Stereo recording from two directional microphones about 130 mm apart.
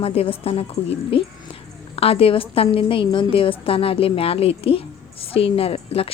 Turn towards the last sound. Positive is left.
turn(degrees=50)  # may be behind; listen again after turning